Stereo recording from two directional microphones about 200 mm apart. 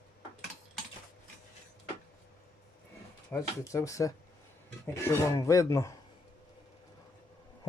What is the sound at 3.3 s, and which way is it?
Speech, 15° left (ahead or behind).